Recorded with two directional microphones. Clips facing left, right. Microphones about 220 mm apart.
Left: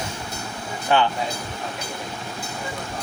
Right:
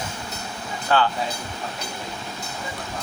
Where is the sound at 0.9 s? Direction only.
20° left (ahead or behind).